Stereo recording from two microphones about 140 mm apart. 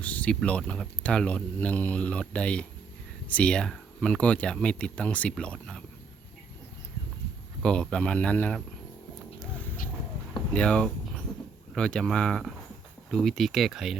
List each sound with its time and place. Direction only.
0.0 s speech: 10° left (ahead or behind)
7.6 s speech: 5° left (ahead or behind)
10.5 s speech: 10° left (ahead or behind)